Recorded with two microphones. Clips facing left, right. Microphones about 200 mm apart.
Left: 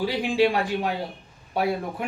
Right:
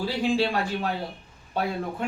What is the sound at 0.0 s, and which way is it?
Speech, 15° left (ahead or behind).